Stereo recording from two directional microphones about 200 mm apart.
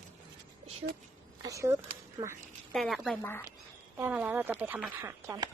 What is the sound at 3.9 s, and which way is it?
Speech, 10° right (ahead or behind).